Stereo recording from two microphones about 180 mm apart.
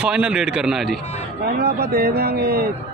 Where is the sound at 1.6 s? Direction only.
60° right (ahead or behind).